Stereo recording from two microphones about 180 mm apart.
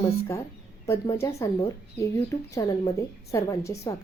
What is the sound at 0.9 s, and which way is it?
A woman's voice, 15° left (ahead or behind).